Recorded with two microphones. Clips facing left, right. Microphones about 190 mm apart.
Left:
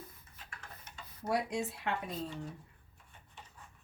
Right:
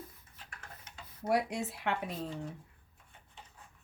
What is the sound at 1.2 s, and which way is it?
A woman's voice, 60° right (ahead or behind).